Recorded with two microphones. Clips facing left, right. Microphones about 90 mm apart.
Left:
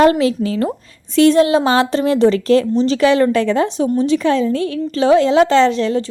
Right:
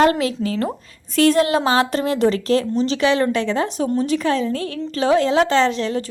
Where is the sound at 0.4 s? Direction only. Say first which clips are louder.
Left 3 dB; 25° left (ahead or behind).